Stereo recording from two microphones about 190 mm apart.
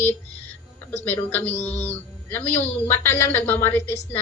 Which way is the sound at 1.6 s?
35° left (ahead or behind).